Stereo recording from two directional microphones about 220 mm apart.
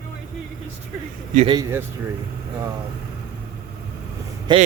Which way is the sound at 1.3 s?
25° right (ahead or behind).